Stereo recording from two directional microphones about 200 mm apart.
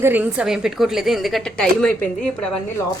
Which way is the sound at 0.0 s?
10° right (ahead or behind).